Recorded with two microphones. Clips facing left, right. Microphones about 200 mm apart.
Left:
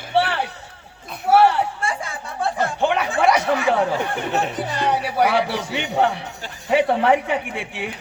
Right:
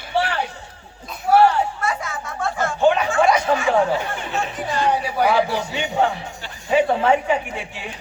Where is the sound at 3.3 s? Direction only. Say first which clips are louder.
Right 1 dB; 70° left (ahead or behind).